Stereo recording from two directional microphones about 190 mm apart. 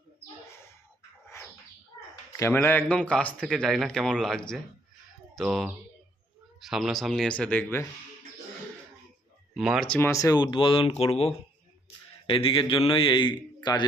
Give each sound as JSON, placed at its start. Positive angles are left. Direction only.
{"t": 2.4, "sound": "speech", "side_deg": 10}
{"t": 9.6, "sound": "speech", "side_deg": 0}
{"t": 9.9, "sound": "a man's voice", "side_deg": 15}